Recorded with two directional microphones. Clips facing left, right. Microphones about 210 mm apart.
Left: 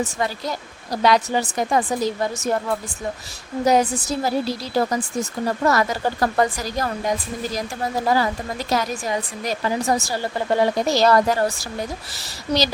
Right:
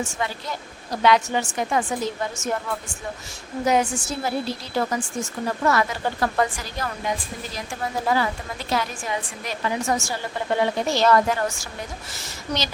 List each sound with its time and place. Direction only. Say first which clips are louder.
0.0 s speech: left 4 dB; 40° left (ahead or behind)
3.6 s speech: left 3 dB; 35° left (ahead or behind)